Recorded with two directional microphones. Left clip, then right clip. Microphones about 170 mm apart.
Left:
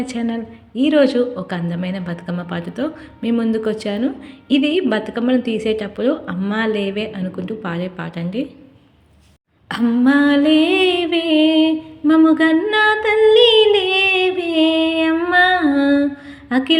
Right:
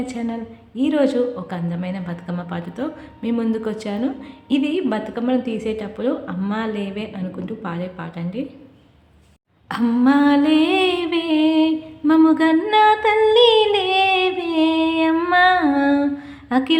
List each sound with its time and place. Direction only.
0.0 s a woman's voice: 25° left (ahead or behind)
9.6 s female singing: 10° left (ahead or behind)
16.5 s a sound: 10° left (ahead or behind)